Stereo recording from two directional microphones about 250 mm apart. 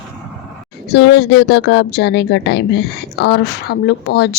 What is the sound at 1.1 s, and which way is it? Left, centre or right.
Speech, left.